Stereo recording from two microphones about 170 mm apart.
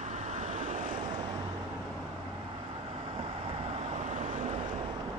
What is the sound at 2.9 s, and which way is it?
Vehicle, 30° right (ahead or behind).